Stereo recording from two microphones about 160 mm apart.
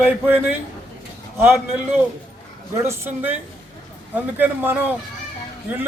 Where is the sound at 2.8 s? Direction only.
15° right (ahead or behind).